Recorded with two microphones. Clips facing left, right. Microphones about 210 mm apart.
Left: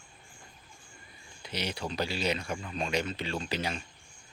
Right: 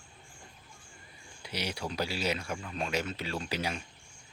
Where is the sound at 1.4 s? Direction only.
10° right (ahead or behind).